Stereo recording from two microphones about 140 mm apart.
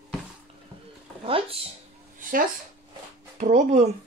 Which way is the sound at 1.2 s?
40° right (ahead or behind).